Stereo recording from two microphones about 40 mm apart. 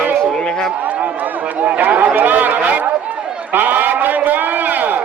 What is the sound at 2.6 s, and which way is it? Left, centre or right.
A man's voice, right.